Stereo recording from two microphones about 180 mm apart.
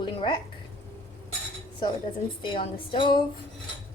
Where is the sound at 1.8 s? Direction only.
25° left (ahead or behind).